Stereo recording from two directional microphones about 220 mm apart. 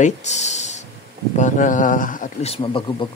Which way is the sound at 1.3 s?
35° left (ahead or behind).